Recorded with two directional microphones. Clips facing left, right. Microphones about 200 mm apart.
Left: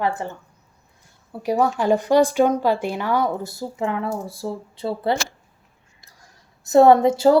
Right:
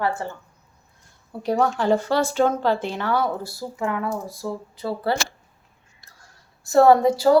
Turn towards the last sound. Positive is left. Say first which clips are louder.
# left 1 dB
turn(degrees=25)  # may be behind; listen again after turning